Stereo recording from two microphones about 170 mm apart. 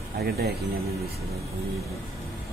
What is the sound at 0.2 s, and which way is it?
Speech, 65° right (ahead or behind).